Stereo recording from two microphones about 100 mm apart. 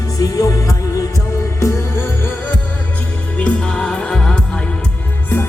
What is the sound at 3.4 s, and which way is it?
Music, 10° left (ahead or behind).